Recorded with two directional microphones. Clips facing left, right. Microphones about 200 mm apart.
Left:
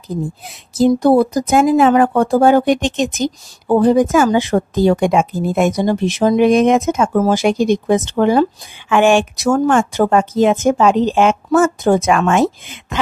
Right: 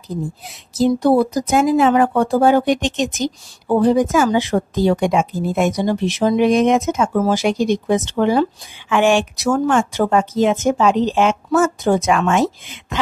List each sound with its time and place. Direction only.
0.7 s speech: 50° left (ahead or behind)